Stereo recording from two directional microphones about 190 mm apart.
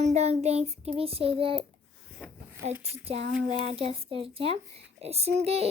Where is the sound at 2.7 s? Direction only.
10° right (ahead or behind).